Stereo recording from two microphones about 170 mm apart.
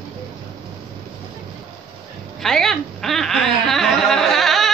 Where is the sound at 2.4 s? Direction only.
5° left (ahead or behind).